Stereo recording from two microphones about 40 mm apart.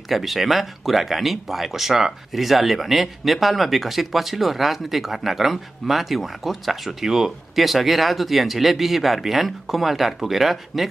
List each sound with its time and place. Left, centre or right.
0.1 s speech: centre